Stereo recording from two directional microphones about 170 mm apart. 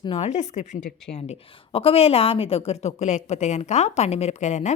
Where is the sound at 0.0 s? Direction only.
35° left (ahead or behind).